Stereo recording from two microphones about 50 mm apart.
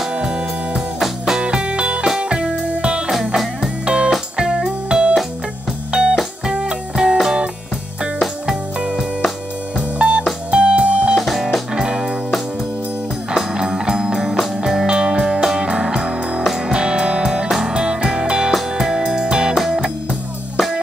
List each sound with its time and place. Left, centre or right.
0.1 s music: centre
8.7 s music: centre
11.1 s music: centre
13.3 s music: centre
19.5 s music: centre